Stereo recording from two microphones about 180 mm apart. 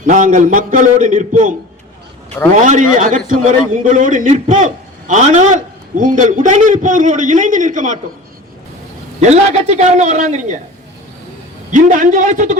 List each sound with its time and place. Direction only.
0.0 s a man's voice: 45° right (ahead or behind)
2.6 s a man's voice: 45° right (ahead or behind)
9.2 s a man's voice: 40° right (ahead or behind)
11.7 s a man's voice: 45° right (ahead or behind)